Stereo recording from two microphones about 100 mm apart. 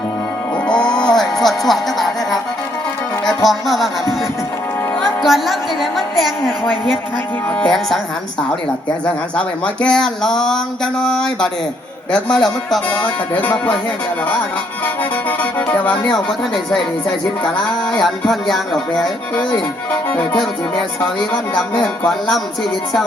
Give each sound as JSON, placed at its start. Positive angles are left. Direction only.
{"t": 0.7, "sound": "music", "side_deg": 10}
{"t": 3.2, "sound": "speech", "side_deg": 0}
{"t": 5.2, "sound": "a woman's voice", "side_deg": 0}
{"t": 7.6, "sound": "a sound", "side_deg": 5}
{"t": 9.8, "sound": "a sound", "side_deg": 5}
{"t": 12.1, "sound": "a woman's voice", "side_deg": 5}
{"t": 12.9, "sound": "a sound", "side_deg": 15}
{"t": 15.3, "sound": "speech", "side_deg": 15}
{"t": 18.0, "sound": "a woman's voice", "side_deg": 0}
{"t": 20.1, "sound": "music", "side_deg": 15}